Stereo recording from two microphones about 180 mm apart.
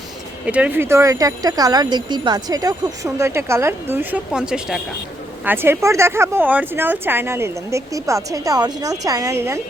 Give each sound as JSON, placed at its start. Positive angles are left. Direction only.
{"t": 0.4, "sound": "speech", "side_deg": -5}